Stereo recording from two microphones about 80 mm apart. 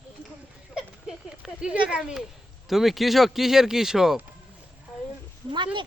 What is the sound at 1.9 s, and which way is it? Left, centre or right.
Speech, centre.